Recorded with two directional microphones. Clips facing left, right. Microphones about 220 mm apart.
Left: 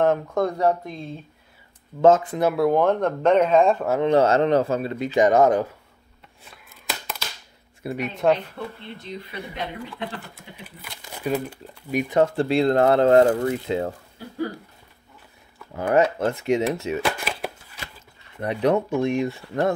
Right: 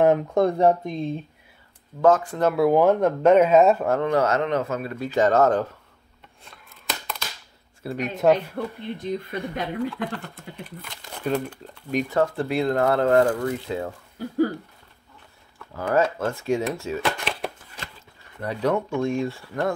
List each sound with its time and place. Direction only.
0.0 s speech: 15° right (ahead or behind)
2.0 s speech: 20° left (ahead or behind)
2.4 s speech: centre (ahead or behind)
4.0 s speech: 25° left (ahead or behind)
6.4 s a sound: 5° left (ahead or behind)
7.8 s speech: 10° left (ahead or behind)
8.6 s speech: 50° right (ahead or behind)
10.3 s speech: 5° left (ahead or behind)
12.2 s speech: 30° left (ahead or behind)
15.7 s speech: 20° left (ahead or behind)
17.0 s a sound: centre (ahead or behind)
18.4 s speech: 20° left (ahead or behind)